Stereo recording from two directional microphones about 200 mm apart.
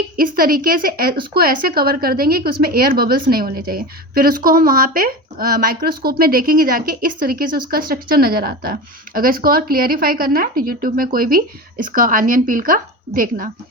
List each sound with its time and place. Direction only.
0.2 s a woman's voice: 45° right (ahead or behind)